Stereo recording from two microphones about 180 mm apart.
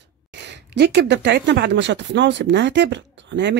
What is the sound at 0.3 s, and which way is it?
Speech, 75° right (ahead or behind).